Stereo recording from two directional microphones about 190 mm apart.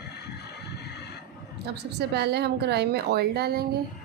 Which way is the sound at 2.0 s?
60° right (ahead or behind).